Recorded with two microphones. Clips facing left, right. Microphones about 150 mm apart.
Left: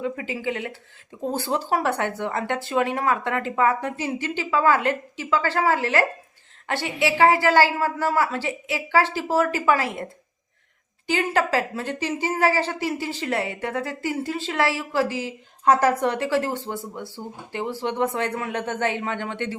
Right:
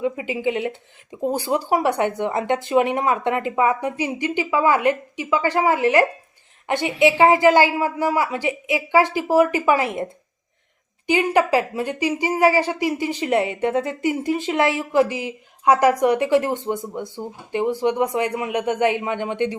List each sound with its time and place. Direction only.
0.0 s speech: 20° right (ahead or behind)